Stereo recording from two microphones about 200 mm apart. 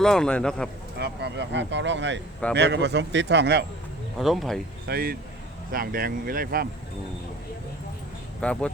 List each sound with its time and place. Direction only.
0.0 s speech: 5° left (ahead or behind)
0.9 s speech: 55° right (ahead or behind)
4.2 s speech: centre (ahead or behind)
4.9 s speech: 50° right (ahead or behind)
8.4 s speech: 5° left (ahead or behind)